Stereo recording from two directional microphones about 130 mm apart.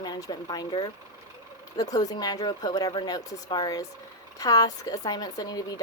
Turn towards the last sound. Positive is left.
turn(degrees=30)  # may be behind; listen again after turning